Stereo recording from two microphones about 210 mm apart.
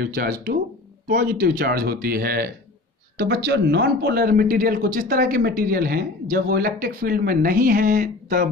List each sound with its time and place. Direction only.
0.0 s speech: 45° right (ahead or behind)